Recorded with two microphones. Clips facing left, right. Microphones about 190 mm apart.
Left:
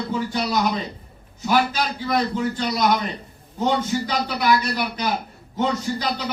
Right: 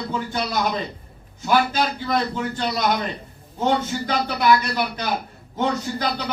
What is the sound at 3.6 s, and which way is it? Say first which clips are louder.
Speech: even; 50° right (ahead or behind).